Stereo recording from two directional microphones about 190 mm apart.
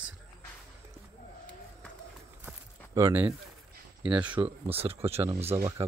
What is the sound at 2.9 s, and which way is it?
Speech, 15° right (ahead or behind).